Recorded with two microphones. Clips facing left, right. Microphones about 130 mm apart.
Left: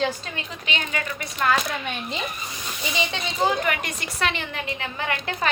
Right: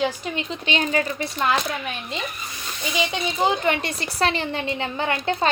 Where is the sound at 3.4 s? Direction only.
30° right (ahead or behind).